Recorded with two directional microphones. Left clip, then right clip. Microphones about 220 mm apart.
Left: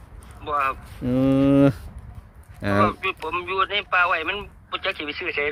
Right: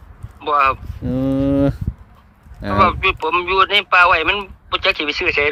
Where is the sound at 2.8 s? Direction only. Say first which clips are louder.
Right 8 dB; 50° right (ahead or behind).